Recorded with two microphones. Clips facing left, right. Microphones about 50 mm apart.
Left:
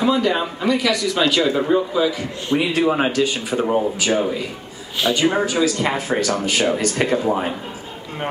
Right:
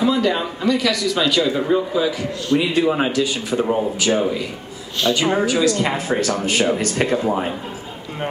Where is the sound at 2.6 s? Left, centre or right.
Left.